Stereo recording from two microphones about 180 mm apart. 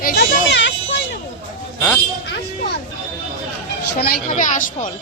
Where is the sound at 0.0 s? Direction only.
55° left (ahead or behind).